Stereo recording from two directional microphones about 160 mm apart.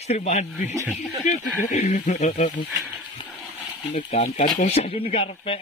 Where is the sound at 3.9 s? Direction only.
50° left (ahead or behind).